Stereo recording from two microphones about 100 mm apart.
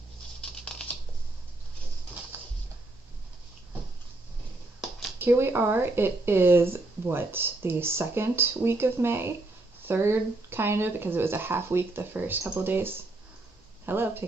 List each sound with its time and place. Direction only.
0.4 s patter: 5° left (ahead or behind)
2.3 s a sound: 20° right (ahead or behind)
5.2 s speech: 20° right (ahead or behind)